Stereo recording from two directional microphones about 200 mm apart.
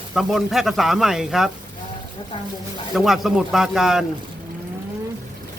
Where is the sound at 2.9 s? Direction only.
Centre (ahead or behind).